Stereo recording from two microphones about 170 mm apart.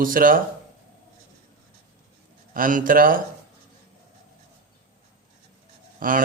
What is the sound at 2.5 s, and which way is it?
Speech, 50° right (ahead or behind).